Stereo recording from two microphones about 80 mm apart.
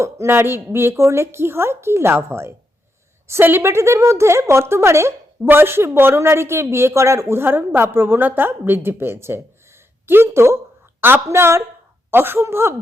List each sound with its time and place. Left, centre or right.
0.0 s speech: right